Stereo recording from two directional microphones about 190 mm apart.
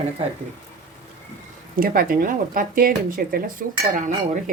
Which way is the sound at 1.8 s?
50° right (ahead or behind).